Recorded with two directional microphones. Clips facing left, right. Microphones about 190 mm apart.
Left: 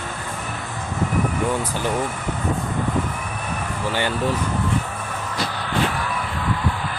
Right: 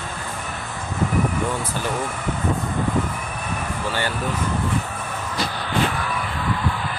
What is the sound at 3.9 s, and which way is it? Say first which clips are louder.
Speech: left 3 dB; 15° left (ahead or behind).